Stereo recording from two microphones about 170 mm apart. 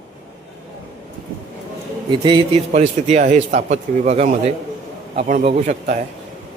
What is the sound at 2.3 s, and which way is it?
A man's voice, 40° right (ahead or behind).